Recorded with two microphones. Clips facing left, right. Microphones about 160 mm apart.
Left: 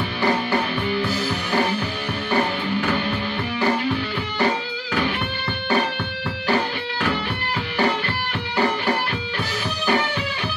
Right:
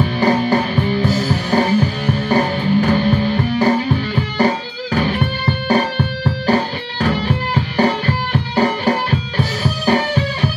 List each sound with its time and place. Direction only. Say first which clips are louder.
0.2 s music: right 5 dB; 40° right (ahead or behind)